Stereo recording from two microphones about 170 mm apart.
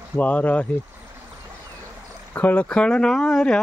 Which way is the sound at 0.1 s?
10° left (ahead or behind).